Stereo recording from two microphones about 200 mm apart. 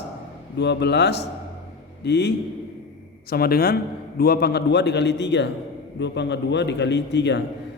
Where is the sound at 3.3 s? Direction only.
50° left (ahead or behind).